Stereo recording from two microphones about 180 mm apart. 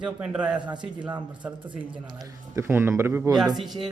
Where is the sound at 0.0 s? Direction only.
5° right (ahead or behind).